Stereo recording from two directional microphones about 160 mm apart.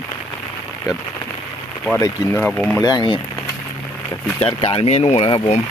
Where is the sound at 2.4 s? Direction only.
5° left (ahead or behind).